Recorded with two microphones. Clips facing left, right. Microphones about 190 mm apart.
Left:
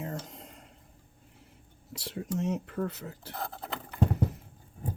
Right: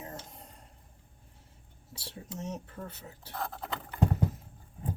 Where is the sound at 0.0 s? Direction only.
75° left (ahead or behind).